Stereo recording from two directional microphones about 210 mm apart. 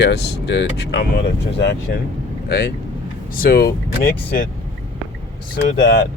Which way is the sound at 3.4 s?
45° left (ahead or behind).